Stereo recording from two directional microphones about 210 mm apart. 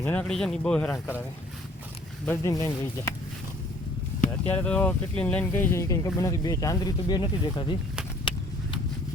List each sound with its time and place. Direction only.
0.0 s speech: 5° left (ahead or behind)
2.2 s speech: 15° left (ahead or behind)
4.4 s speech: 5° left (ahead or behind); by 7.8 s 20° left (ahead or behind)
8.3 s vehicle: 25° left (ahead or behind)